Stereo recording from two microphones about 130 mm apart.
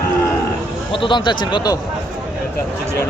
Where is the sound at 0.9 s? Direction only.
40° left (ahead or behind).